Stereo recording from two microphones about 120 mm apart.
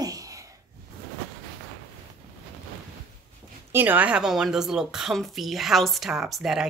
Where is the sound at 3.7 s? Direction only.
15° right (ahead or behind).